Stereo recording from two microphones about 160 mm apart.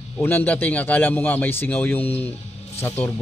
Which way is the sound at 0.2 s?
10° left (ahead or behind).